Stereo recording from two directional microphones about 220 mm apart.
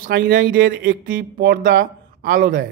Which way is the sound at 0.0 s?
40° right (ahead or behind).